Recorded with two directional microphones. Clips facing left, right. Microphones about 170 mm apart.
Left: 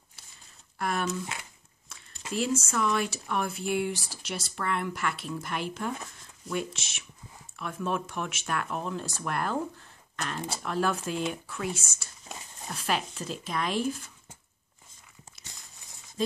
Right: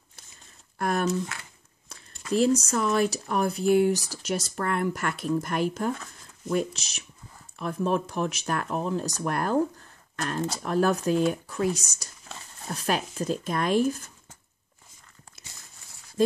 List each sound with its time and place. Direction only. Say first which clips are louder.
0.7 s a sound: right 5 dB; 45° right (ahead or behind)
2.3 s speech: right 6 dB; 40° right (ahead or behind)
10.6 s speech: right 5 dB; 45° right (ahead or behind)